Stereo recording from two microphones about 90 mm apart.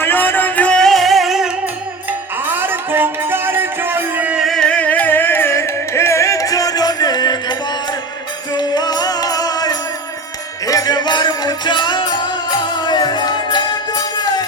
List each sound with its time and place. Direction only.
0.0 s music: 25° left (ahead or behind)
0.9 s music: centre (ahead or behind)
2.5 s music: 25° right (ahead or behind)
4.4 s music: 5° left (ahead or behind); by 7.5 s 50° left (ahead or behind)
8.5 s music: 50° left (ahead or behind)